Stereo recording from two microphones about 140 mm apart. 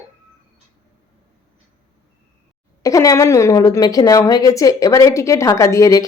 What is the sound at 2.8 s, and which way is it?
A woman's voice, 25° left (ahead or behind).